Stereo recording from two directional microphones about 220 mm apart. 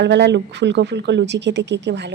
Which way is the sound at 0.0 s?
50° right (ahead or behind).